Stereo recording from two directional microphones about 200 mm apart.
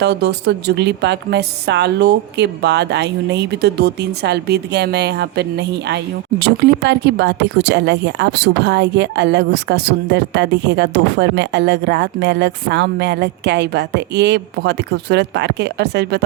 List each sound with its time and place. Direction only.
0.0 s speech: 55° right (ahead or behind)